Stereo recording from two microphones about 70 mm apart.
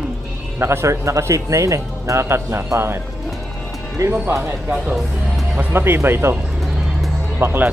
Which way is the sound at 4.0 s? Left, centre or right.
Right.